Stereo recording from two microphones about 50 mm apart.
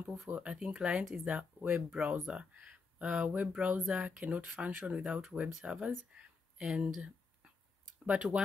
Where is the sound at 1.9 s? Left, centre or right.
Centre.